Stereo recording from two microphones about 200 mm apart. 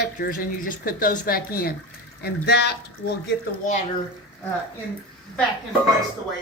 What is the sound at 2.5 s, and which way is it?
Speech, 55° left (ahead or behind).